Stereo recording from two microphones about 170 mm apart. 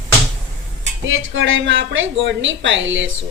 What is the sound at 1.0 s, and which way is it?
Speech, 90° right.